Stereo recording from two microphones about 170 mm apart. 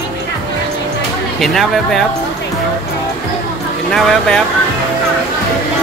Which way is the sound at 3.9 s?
Centre (ahead or behind).